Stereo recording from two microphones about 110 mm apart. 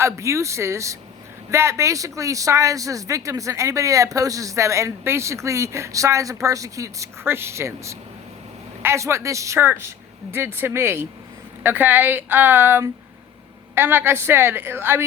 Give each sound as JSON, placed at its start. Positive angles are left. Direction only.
{"t": 0.0, "sound": "a woman's voice", "side_deg": -25}